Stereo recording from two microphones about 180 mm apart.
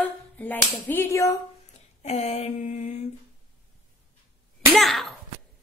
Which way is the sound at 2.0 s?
35° left (ahead or behind).